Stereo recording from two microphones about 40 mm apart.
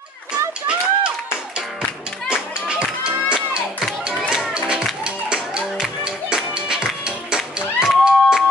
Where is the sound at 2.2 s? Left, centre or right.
Right.